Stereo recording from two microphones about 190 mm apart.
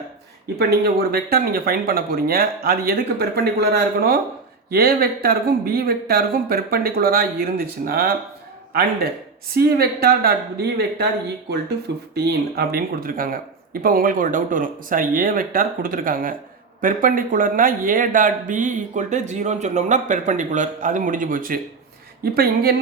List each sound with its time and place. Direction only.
0.6 s speech: 55° right (ahead or behind)
9.6 s speech: 55° right (ahead or behind)
12.1 s speech: 55° right (ahead or behind)